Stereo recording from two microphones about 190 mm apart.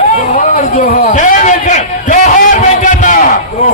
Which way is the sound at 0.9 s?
45° left (ahead or behind).